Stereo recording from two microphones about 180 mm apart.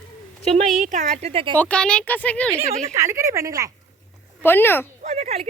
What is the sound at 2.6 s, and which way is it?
Speech, 40° right (ahead or behind).